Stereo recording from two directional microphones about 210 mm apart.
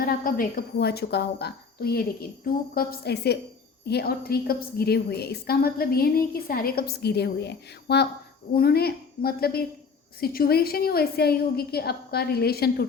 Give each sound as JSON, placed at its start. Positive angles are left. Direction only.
{"t": 0.0, "sound": "a woman's voice", "side_deg": 45}